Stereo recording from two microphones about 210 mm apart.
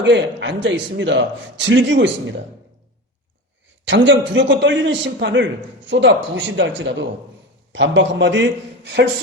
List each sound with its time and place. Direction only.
0.0 s a man's voice: 60° right (ahead or behind)
3.8 s a man's voice: 60° right (ahead or behind)